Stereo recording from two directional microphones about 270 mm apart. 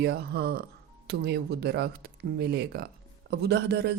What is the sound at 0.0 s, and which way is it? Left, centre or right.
Speech, right.